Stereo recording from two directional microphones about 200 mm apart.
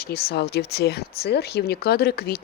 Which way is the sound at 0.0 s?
50° left (ahead or behind).